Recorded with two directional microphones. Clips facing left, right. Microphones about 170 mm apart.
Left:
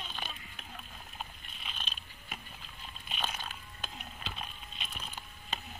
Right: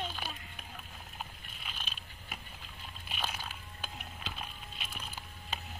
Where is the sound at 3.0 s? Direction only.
10° right (ahead or behind).